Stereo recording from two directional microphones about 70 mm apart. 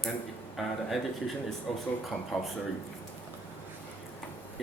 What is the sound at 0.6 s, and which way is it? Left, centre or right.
Speech, centre.